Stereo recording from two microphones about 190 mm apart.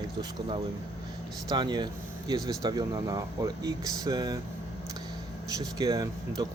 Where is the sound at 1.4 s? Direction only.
25° right (ahead or behind).